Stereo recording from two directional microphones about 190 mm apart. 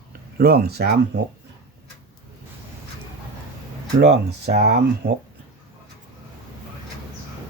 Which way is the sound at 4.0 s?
60° right (ahead or behind).